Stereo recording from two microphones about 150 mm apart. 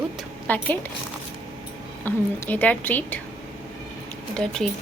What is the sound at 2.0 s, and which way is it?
A woman's voice, 10° left (ahead or behind).